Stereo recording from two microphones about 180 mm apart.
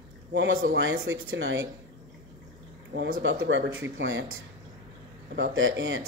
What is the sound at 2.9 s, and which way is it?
Speech, 90° right.